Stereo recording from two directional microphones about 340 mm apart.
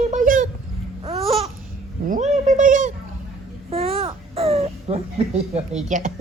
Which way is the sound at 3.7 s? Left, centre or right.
Centre.